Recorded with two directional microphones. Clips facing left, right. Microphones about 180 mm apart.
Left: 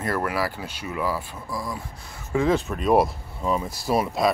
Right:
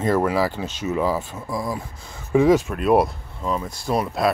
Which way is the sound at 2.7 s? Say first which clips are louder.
Right 2 dB; centre (ahead or behind).